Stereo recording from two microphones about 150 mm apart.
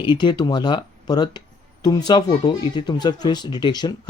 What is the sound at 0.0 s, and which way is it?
Speech, 30° left (ahead or behind).